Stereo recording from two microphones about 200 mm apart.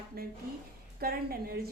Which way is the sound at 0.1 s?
50° right (ahead or behind).